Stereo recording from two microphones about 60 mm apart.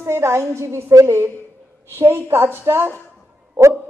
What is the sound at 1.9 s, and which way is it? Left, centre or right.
A woman's voice, right.